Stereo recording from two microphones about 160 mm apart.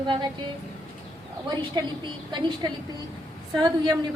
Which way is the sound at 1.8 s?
30° right (ahead or behind).